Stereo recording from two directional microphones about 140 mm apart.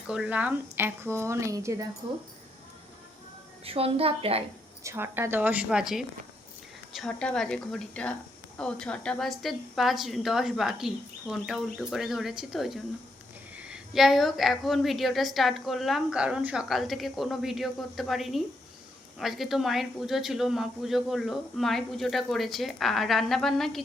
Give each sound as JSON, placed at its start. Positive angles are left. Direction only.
{"t": 0.1, "sound": "speech", "side_deg": -10}
{"t": 3.6, "sound": "a woman's voice", "side_deg": -45}
{"t": 4.8, "sound": "a woman's voice", "side_deg": -20}